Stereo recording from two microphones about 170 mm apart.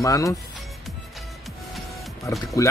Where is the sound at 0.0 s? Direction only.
20° left (ahead or behind).